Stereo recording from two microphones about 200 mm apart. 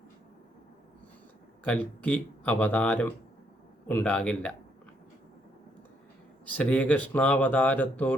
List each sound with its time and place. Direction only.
1.6 s a man's voice: 5° left (ahead or behind)
6.4 s speech: 5° left (ahead or behind)